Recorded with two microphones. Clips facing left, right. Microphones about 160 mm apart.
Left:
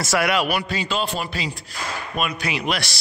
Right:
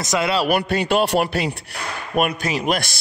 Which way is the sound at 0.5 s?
55° right (ahead or behind).